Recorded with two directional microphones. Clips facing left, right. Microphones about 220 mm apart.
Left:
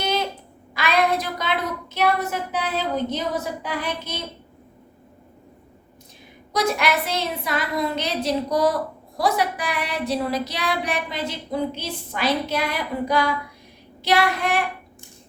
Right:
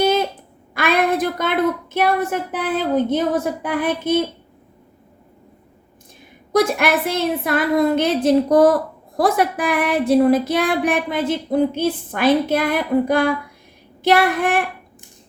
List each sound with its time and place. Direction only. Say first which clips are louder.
0.7 s a woman's voice: right 3 dB; 50° right (ahead or behind)
6.5 s a woman's voice: right 5 dB; 50° right (ahead or behind)